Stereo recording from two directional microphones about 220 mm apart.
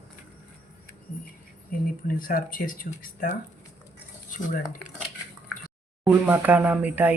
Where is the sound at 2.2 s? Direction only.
40° left (ahead or behind).